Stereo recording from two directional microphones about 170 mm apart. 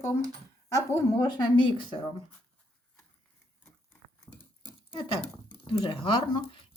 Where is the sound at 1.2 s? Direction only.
25° left (ahead or behind).